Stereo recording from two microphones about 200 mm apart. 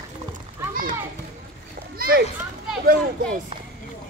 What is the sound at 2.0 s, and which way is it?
Children playing, 45° right (ahead or behind).